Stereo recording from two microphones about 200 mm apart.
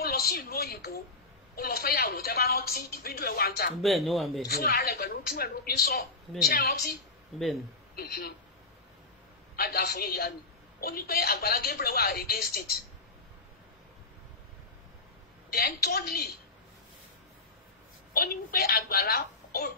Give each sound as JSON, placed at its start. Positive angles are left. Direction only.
{"t": 0.0, "sound": "a woman's voice", "side_deg": 50}
{"t": 3.8, "sound": "speech", "side_deg": 0}
{"t": 4.5, "sound": "a woman's voice", "side_deg": 50}
{"t": 9.6, "sound": "a woman's voice", "side_deg": 50}
{"t": 15.5, "sound": "a woman's voice", "side_deg": 50}
{"t": 18.1, "sound": "a child's voice", "side_deg": 50}